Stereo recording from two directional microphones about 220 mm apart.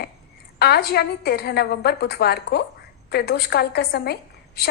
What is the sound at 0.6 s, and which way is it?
A woman's voice, 45° left (ahead or behind).